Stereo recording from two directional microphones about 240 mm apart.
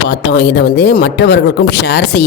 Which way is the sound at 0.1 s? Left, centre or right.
Left.